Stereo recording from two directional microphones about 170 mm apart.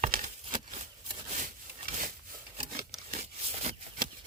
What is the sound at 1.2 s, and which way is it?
Sawing, 50° right (ahead or behind).